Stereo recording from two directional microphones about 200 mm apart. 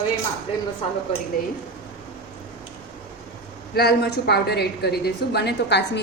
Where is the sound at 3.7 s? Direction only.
55° left (ahead or behind).